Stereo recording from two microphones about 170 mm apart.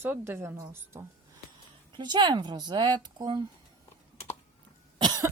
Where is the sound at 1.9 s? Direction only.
25° right (ahead or behind).